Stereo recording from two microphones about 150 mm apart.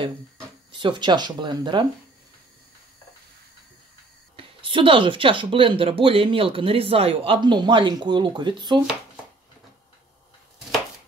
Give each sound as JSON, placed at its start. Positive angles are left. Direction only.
{"t": 0.7, "sound": "speech", "side_deg": -35}
{"t": 4.4, "sound": "speech", "side_deg": -35}